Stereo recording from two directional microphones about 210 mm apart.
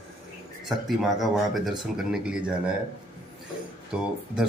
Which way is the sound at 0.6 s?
Centre (ahead or behind).